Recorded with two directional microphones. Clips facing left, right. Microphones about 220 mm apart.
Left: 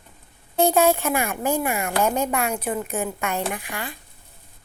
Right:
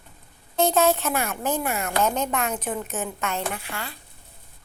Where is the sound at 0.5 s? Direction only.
15° left (ahead or behind).